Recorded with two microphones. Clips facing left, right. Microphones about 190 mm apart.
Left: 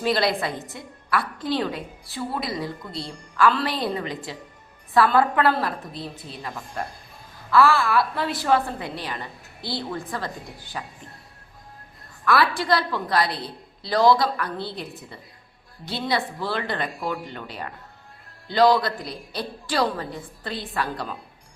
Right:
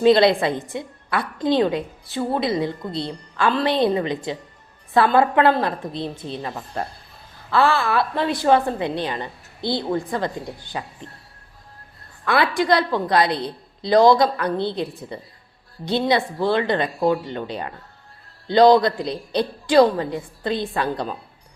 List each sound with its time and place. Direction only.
0.0 s a woman's voice: 25° right (ahead or behind)
12.2 s a woman's voice: 20° right (ahead or behind)